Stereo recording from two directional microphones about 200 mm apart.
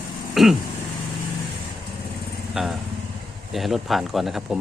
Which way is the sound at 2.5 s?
Centre (ahead or behind).